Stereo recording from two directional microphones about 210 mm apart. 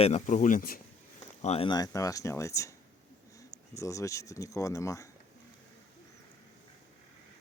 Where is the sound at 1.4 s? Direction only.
30° left (ahead or behind); by 2.7 s 15° left (ahead or behind).